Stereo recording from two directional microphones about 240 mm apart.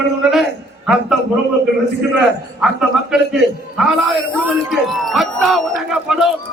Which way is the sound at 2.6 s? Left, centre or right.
Centre.